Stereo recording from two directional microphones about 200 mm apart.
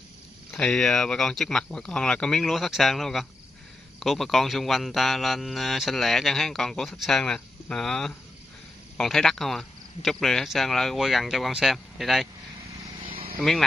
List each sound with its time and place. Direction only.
0.5 s a man's voice: 5° left (ahead or behind)
13.0 s cricket: 25° right (ahead or behind)
13.4 s a man's voice: centre (ahead or behind)